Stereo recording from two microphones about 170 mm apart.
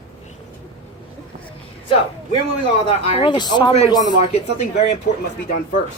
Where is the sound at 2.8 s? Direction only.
35° left (ahead or behind).